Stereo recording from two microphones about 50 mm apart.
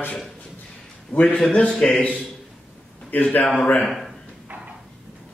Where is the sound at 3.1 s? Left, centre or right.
Left.